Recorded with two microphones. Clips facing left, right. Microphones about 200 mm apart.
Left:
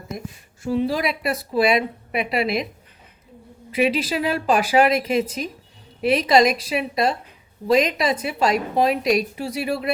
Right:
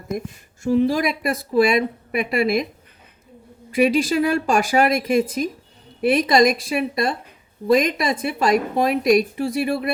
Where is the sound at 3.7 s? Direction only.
45° right (ahead or behind).